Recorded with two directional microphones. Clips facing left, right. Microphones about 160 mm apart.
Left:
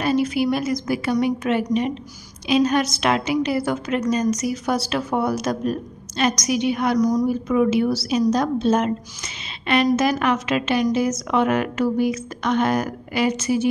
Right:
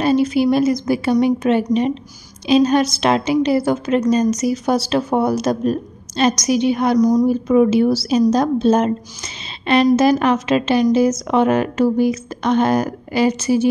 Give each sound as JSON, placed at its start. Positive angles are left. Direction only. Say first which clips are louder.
{"t": 0.0, "sound": "a woman's voice", "louder": "right 5 dB", "side_deg": -30}